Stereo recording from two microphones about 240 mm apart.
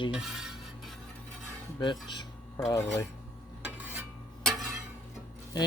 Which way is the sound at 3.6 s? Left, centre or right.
Centre.